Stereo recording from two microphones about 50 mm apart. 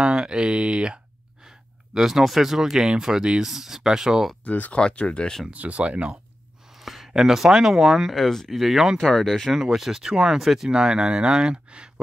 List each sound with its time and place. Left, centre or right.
0.0 s a sound: centre
2.0 s speech: centre
4.5 s speech: left
4.7 s speech: left
5.5 s speech: right
6.8 s speech: centre
9.6 s speech: centre